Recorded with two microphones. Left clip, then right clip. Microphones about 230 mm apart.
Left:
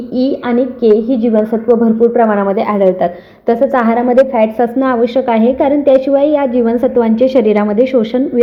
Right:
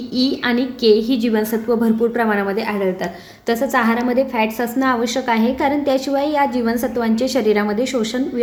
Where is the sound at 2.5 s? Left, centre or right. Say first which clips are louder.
Left 9 dB; centre.